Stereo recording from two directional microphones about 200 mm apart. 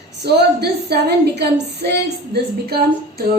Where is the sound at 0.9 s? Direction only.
55° right (ahead or behind).